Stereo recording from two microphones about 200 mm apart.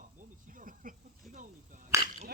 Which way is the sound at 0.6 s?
45° right (ahead or behind).